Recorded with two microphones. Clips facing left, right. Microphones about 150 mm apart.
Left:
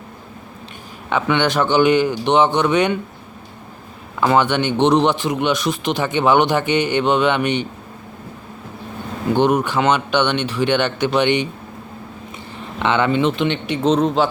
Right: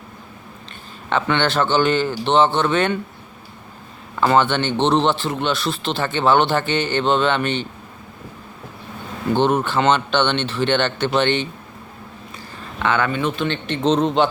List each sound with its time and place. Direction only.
1.1 s speech: 10° left (ahead or behind)
4.2 s speech: 10° left (ahead or behind)
9.3 s speech: 10° left (ahead or behind)
12.5 s speech: 20° left (ahead or behind); by 14.3 s 5° left (ahead or behind)